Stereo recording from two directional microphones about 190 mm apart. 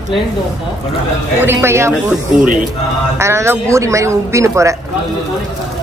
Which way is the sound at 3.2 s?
15° right (ahead or behind).